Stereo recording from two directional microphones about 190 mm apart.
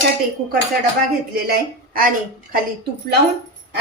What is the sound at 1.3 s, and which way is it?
Speech, 50° right (ahead or behind).